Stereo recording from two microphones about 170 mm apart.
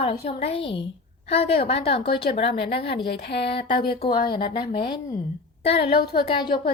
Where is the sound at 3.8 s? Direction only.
30° left (ahead or behind).